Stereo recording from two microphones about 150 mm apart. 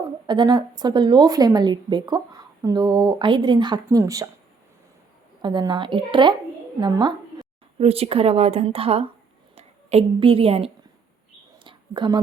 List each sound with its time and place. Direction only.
0.3 s a woman's voice: 30° right (ahead or behind)
5.4 s a woman's voice: 30° right (ahead or behind)
7.8 s a woman's voice: 40° right (ahead or behind)
11.6 s whispering: 30° right (ahead or behind)